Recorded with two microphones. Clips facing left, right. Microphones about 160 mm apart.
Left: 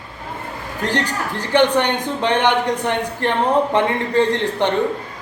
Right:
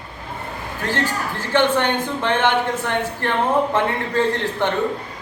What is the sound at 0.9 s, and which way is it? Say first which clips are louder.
A man's voice: even; 15° left (ahead or behind).